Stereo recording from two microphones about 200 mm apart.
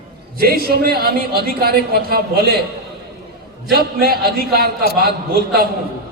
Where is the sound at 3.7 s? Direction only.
50° right (ahead or behind).